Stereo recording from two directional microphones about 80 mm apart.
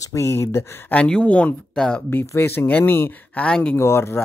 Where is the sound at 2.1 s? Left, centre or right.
Left.